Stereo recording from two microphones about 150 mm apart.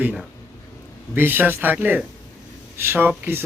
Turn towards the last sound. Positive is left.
turn(degrees=-15)  # may be behind; listen again after turning